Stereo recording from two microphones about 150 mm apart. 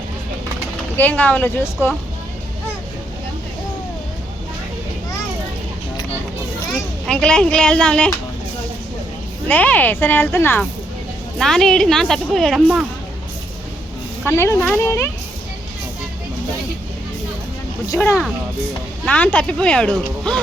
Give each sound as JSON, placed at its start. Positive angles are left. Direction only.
{"t": 0.9, "sound": "speech", "side_deg": 10}
{"t": 7.1, "sound": "speech", "side_deg": 5}
{"t": 9.5, "sound": "speech", "side_deg": 10}
{"t": 11.3, "sound": "a woman's voice", "side_deg": 5}
{"t": 14.3, "sound": "speech", "side_deg": 15}
{"t": 17.9, "sound": "speech", "side_deg": 20}